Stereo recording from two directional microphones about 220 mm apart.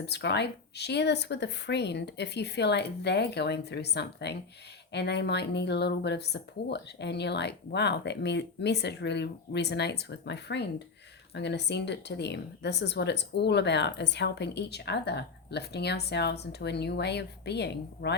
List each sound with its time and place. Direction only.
0.0 s a woman's voice: 50° left (ahead or behind)